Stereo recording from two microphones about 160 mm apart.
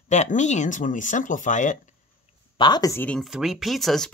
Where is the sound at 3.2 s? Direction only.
5° right (ahead or behind).